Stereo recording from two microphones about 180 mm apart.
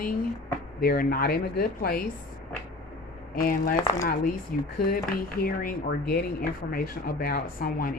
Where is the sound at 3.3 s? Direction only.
50° left (ahead or behind).